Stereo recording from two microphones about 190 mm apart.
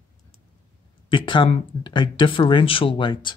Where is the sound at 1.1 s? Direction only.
25° left (ahead or behind).